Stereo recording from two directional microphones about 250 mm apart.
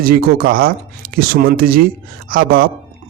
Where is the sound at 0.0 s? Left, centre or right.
Right.